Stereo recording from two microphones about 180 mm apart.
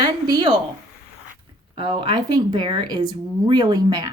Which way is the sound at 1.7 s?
25° right (ahead or behind).